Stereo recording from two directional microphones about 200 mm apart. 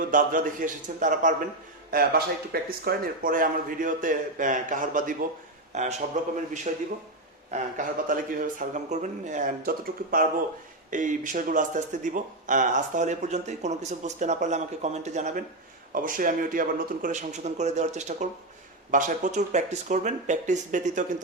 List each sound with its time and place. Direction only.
0.1 s speech: 40° right (ahead or behind)